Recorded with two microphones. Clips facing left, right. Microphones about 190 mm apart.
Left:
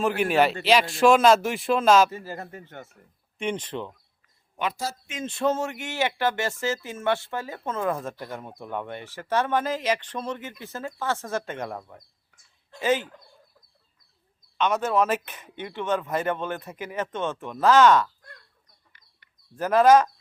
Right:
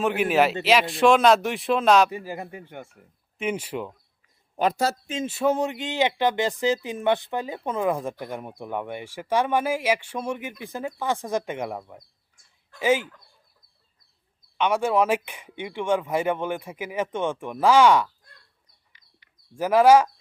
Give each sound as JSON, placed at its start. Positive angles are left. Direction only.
{"t": 0.0, "sound": "a man's voice", "side_deg": 0}
{"t": 2.0, "sound": "speech", "side_deg": -15}
{"t": 4.5, "sound": "speech", "side_deg": -40}
{"t": 5.2, "sound": "speech", "side_deg": -10}
{"t": 14.6, "sound": "speech", "side_deg": -10}
{"t": 19.0, "sound": "bird", "side_deg": 55}
{"t": 19.5, "sound": "speech", "side_deg": -10}